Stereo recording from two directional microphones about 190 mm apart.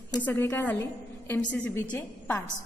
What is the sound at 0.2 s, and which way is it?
A woman's voice, 10° left (ahead or behind).